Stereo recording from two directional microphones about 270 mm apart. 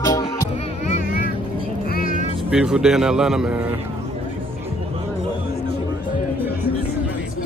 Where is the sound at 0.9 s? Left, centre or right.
Left.